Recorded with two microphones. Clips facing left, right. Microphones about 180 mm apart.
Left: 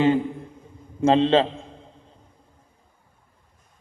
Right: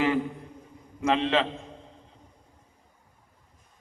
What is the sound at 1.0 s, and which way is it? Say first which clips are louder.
Speech: left 7 dB; 30° left (ahead or behind).